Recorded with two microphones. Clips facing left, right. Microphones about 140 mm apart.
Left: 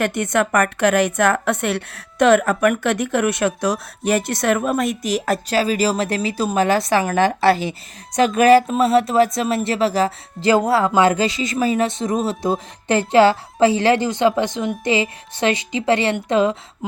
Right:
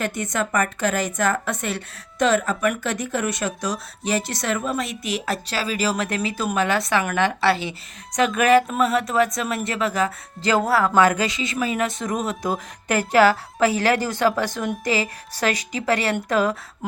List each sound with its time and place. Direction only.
0.0 s a woman's voice: 65° left (ahead or behind); by 16.6 s 25° left (ahead or behind)